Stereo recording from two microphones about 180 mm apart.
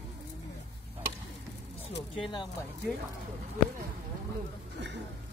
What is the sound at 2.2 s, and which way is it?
Speech, 25° left (ahead or behind).